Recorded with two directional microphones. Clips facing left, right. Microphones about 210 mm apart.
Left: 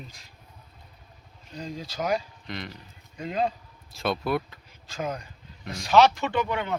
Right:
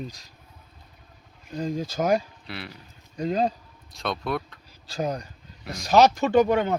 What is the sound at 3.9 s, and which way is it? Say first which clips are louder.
Speech: left 2 dB; centre (ahead or behind).